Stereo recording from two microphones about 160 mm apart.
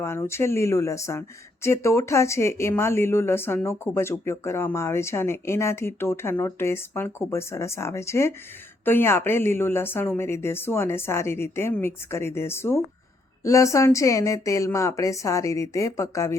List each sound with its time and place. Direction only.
0.0 s speech: 15° left (ahead or behind)